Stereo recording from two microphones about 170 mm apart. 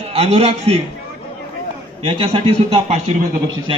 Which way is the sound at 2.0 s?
35° right (ahead or behind).